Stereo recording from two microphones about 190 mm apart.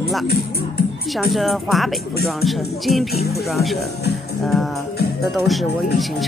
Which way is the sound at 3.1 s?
55° left (ahead or behind).